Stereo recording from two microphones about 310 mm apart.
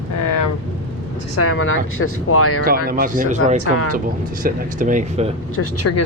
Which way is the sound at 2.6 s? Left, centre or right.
Right.